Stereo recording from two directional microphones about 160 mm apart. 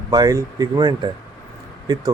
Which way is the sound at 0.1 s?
25° right (ahead or behind).